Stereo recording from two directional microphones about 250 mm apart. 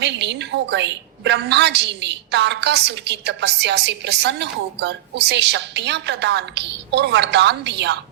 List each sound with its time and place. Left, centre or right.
0.0 s a woman's voice: right